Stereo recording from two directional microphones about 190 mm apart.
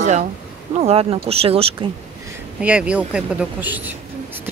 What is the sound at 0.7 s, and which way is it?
Speech, 30° right (ahead or behind).